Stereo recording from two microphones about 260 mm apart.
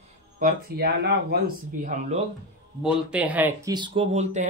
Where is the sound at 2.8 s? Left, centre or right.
Centre; by 4.5 s right.